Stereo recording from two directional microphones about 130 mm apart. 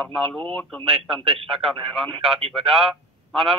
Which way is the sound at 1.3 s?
45° right (ahead or behind).